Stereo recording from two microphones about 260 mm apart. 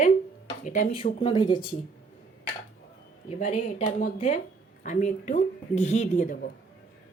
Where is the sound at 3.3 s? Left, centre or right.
Left.